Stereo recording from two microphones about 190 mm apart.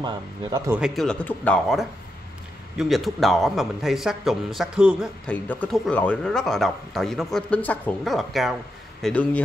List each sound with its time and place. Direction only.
0.0 s speech: 20° right (ahead or behind)
0.7 s speech: centre (ahead or behind)
5.2 s speech: 5° left (ahead or behind)